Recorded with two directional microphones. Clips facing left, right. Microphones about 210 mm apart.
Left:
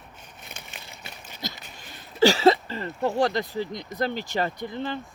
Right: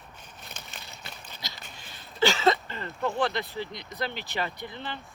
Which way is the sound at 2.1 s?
35° left (ahead or behind).